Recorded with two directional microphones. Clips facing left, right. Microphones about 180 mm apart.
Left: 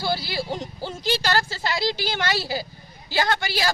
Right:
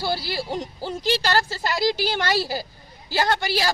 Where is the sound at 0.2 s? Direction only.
35° right (ahead or behind).